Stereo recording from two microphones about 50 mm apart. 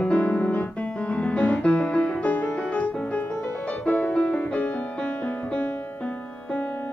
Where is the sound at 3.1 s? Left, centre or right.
Left.